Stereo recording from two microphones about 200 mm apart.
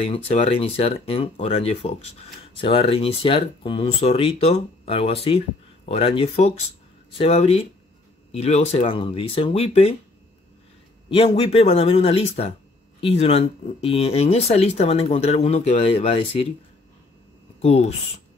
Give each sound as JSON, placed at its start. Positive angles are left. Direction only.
{"t": 0.0, "sound": "speech", "side_deg": 30}
{"t": 11.1, "sound": "speech", "side_deg": 25}
{"t": 17.6, "sound": "speech", "side_deg": 30}